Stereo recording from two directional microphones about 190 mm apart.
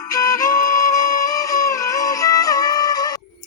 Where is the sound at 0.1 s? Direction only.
20° left (ahead or behind).